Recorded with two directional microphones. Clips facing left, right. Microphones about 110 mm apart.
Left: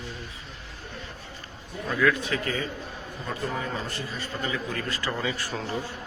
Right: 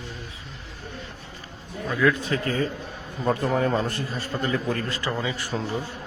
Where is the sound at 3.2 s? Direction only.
55° right (ahead or behind).